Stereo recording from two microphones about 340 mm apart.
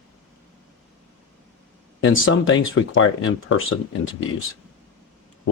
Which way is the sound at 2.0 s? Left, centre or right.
Left.